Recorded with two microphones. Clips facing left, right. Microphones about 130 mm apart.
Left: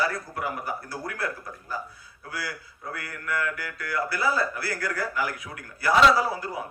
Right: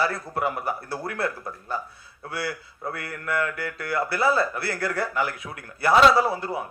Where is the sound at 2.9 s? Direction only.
25° right (ahead or behind).